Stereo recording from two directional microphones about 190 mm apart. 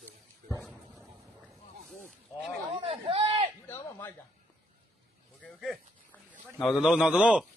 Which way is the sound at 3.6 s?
10° left (ahead or behind).